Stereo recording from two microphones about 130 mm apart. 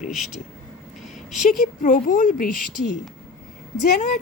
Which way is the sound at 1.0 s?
Centre (ahead or behind).